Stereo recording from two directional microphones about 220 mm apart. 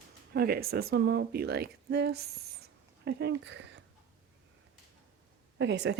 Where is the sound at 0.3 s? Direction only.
45° right (ahead or behind).